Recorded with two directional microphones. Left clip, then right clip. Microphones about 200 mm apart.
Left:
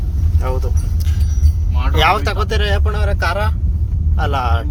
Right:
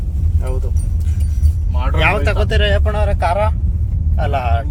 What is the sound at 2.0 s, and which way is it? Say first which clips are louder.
Speech: left 2 dB; 25° left (ahead or behind).